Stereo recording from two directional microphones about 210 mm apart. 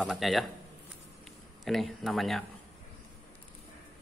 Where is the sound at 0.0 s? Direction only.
Centre (ahead or behind).